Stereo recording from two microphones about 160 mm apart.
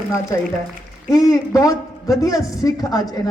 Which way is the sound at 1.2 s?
20° left (ahead or behind).